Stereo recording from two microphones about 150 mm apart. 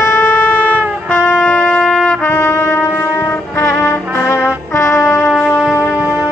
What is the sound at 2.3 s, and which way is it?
Brass instrument, 20° left (ahead or behind).